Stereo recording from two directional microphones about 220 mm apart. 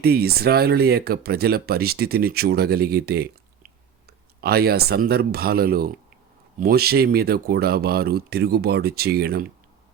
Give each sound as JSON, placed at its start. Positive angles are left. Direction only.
{"t": 0.0, "sound": "speech", "side_deg": -45}